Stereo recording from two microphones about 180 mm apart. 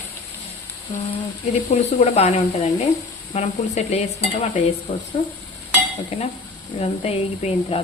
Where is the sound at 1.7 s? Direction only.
35° left (ahead or behind).